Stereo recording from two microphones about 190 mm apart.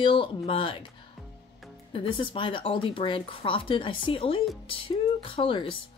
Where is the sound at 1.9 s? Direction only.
30° left (ahead or behind).